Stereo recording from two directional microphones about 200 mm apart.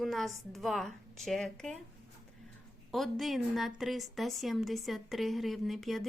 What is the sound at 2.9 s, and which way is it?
A woman's voice, centre (ahead or behind).